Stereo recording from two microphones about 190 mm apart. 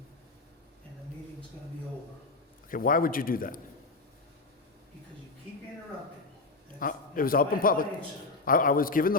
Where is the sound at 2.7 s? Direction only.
45° left (ahead or behind).